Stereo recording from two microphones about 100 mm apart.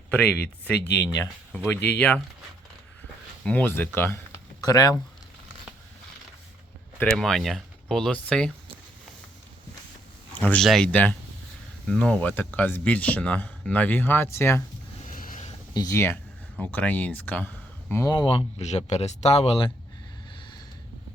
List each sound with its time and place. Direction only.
0.1 s speech: 15° left (ahead or behind)
3.4 s speech: 15° left (ahead or behind)
4.6 s speech: 40° left (ahead or behind)
7.0 s speech: 5° left (ahead or behind)
10.4 s speech: 15° left (ahead or behind)
10.9 s speech: 15° left (ahead or behind)
15.7 s speech: 40° left (ahead or behind)
16.0 s speech: 20° left (ahead or behind)
18.0 s speech: 40° left (ahead or behind)
18.3 s speech: 70° left (ahead or behind)